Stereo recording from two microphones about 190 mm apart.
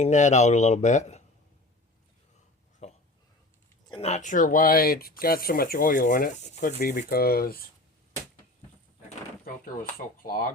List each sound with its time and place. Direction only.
0.0 s speech: 40° left (ahead or behind)
2.8 s a sound: 35° left (ahead or behind)
3.9 s speech: 35° left (ahead or behind); by 7.6 s 50° left (ahead or behind)
9.4 s speech: 50° left (ahead or behind)